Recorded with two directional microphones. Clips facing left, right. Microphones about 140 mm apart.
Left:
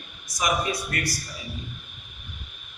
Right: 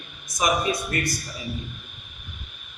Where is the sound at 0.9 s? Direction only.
30° right (ahead or behind).